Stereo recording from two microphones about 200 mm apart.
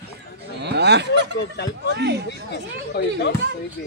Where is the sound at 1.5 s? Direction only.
55° left (ahead or behind).